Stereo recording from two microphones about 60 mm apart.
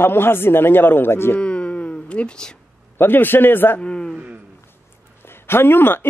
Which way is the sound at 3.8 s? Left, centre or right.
Centre.